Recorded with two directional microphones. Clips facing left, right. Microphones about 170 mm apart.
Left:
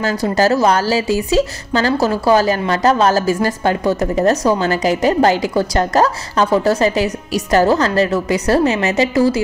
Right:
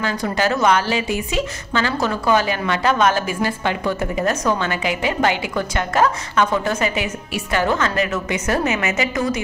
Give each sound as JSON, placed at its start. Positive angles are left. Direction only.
{"t": 0.0, "sound": "a woman's voice", "side_deg": 40}